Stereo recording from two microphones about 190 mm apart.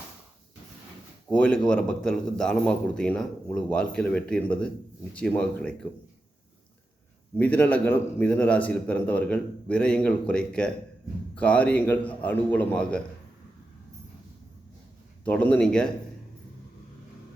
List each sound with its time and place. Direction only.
1.3 s a man's voice: 5° left (ahead or behind)
7.3 s a man's voice: 10° left (ahead or behind)
15.2 s a man's voice: 5° left (ahead or behind)